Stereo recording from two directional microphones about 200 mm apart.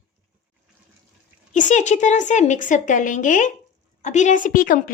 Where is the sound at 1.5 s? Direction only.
35° left (ahead or behind).